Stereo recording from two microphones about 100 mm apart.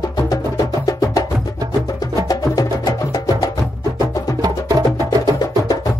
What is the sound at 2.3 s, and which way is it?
Music, 40° left (ahead or behind).